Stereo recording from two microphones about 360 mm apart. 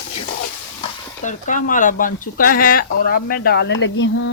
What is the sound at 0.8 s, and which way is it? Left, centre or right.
Speech, left.